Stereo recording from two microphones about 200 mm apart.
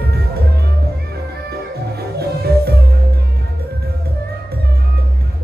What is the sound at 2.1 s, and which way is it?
Music, 55° right (ahead or behind).